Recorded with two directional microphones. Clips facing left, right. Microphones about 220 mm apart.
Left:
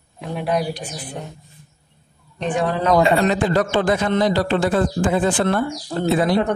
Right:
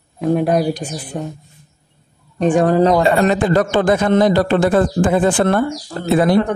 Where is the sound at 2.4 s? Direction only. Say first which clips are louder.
Right 8 dB; 45° right (ahead or behind).